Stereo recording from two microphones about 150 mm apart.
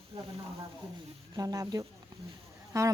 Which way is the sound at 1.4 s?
25° right (ahead or behind).